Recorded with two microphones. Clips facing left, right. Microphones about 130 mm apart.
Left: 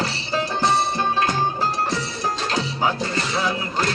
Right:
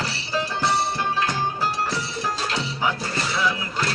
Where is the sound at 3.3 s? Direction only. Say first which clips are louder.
Even; 35° left (ahead or behind).